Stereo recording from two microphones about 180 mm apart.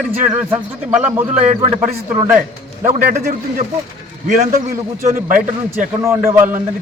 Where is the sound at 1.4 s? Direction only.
35° right (ahead or behind).